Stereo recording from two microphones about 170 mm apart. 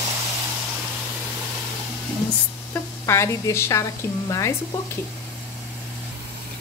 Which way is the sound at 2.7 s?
15° left (ahead or behind).